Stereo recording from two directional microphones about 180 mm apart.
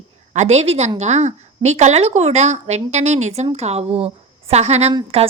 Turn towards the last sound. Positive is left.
turn(degrees=-35)  # may be behind; listen again after turning